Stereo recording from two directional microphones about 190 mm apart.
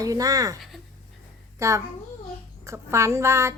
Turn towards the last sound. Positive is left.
turn(degrees=-15)  # may be behind; listen again after turning